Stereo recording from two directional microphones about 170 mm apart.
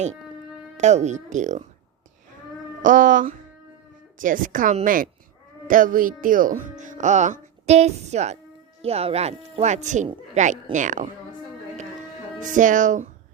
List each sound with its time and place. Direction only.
0.8 s speech: 45° right (ahead or behind)
2.8 s speech: 50° right (ahead or behind)
12.5 s speech: 50° right (ahead or behind)